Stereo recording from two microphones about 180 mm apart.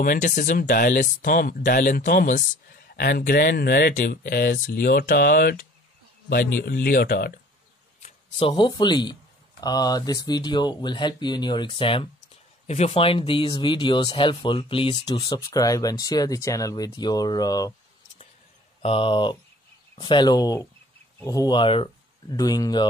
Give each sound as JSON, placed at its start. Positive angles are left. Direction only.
{"t": 0.0, "sound": "speech", "side_deg": 45}
{"t": 8.4, "sound": "speech", "side_deg": 30}
{"t": 18.8, "sound": "speech", "side_deg": 30}